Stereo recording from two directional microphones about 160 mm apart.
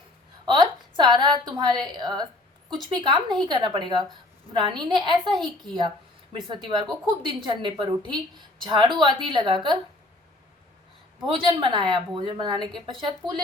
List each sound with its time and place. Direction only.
0.4 s a sound: 30° right (ahead or behind)
1.8 s a woman's voice: 25° right (ahead or behind)
11.3 s a woman's voice: 30° right (ahead or behind)